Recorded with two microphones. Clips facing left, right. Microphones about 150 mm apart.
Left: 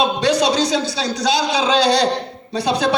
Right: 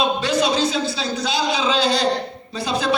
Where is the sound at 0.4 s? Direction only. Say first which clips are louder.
Left 2 dB; 75° left (ahead or behind).